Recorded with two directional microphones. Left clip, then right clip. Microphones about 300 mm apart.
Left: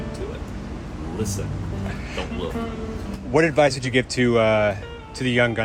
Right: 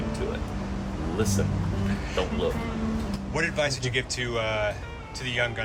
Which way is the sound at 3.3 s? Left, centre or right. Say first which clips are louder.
Left 9 dB; centre.